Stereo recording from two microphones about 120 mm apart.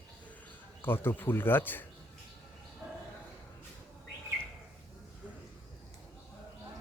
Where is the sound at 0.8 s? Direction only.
20° left (ahead or behind).